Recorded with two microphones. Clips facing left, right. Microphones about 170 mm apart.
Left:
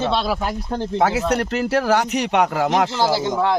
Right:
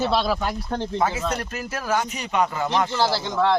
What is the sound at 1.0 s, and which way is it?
Speech, 70° left (ahead or behind).